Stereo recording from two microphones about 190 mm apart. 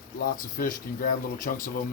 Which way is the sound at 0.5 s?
45° left (ahead or behind).